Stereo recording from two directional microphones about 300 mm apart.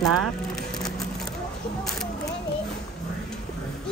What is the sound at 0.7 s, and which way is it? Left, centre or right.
Run, centre.